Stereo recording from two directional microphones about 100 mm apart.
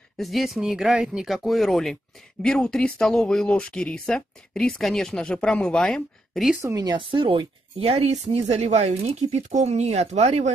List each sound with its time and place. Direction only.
0.2 s speech: centre (ahead or behind)
6.6 s speech: 35° right (ahead or behind); by 10.4 s 90° right